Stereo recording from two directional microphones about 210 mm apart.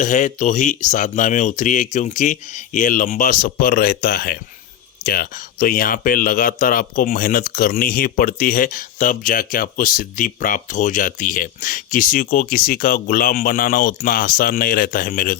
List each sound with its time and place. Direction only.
0.0 s speech: 35° left (ahead or behind)